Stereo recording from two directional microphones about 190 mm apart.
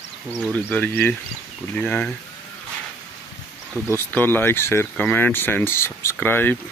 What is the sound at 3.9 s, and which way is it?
Speech, 10° left (ahead or behind).